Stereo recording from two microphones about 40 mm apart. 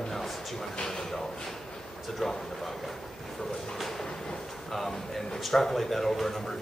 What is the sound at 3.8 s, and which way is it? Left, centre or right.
Train, centre.